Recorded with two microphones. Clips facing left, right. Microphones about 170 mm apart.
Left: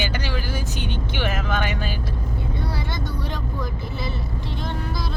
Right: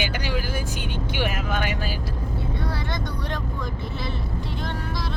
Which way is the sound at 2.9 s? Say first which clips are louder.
Even; 5° left (ahead or behind).